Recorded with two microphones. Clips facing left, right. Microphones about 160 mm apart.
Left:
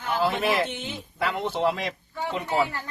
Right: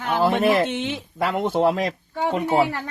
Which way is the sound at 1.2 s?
50° right (ahead or behind).